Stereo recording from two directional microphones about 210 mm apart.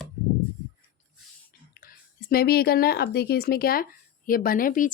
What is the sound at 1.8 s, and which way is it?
Speech, 40° left (ahead or behind).